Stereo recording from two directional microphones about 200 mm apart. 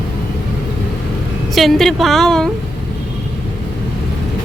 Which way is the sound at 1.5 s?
Centre (ahead or behind).